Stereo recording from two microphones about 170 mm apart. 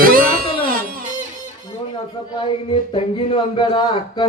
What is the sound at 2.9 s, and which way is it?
Speech, 30° left (ahead or behind).